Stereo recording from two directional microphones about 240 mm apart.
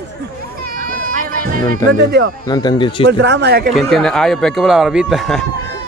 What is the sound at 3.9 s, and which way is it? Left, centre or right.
Speech, centre.